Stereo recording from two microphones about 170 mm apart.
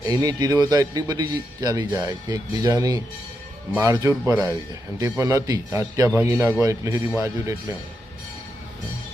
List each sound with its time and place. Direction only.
0.0 s a man's voice: 20° right (ahead or behind)